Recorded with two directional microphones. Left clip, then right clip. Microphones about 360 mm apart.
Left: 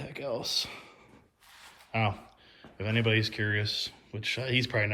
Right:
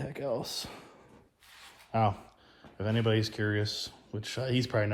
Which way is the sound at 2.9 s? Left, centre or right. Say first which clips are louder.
Left 2 dB; right.